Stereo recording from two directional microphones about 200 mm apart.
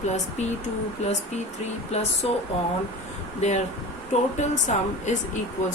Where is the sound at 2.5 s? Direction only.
30° left (ahead or behind).